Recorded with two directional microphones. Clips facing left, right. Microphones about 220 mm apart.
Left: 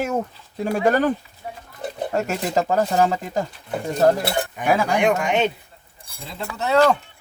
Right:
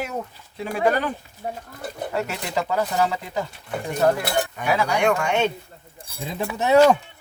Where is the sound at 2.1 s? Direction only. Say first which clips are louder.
Left 5 dB; 45° left (ahead or behind).